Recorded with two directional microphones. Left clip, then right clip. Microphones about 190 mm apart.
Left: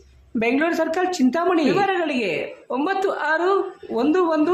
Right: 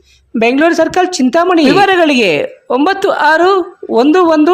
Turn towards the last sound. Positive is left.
turn(degrees=-50)  # may be behind; listen again after turning